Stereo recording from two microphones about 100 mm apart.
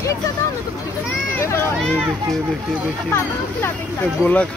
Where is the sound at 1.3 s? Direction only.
25° left (ahead or behind).